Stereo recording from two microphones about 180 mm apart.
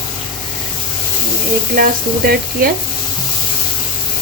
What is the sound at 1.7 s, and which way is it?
Speech, 55° right (ahead or behind).